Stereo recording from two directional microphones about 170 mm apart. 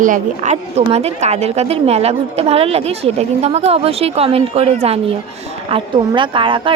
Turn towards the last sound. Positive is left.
turn(degrees=-30)  # may be behind; listen again after turning